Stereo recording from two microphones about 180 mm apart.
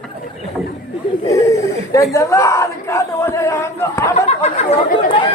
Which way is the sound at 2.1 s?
15° left (ahead or behind).